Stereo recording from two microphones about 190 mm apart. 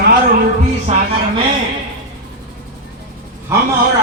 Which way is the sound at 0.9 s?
35° right (ahead or behind).